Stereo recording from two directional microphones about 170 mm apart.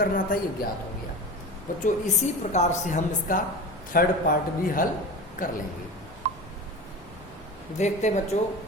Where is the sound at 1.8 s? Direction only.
45° left (ahead or behind).